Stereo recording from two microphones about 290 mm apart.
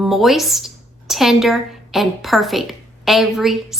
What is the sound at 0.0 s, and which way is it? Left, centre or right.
A woman's voice, centre.